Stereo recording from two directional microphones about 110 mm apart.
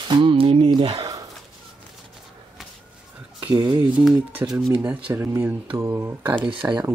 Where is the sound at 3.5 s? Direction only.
40° right (ahead or behind).